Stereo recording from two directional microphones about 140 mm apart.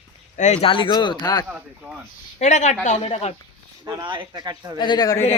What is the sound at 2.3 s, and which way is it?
A woman's voice, 55° left (ahead or behind).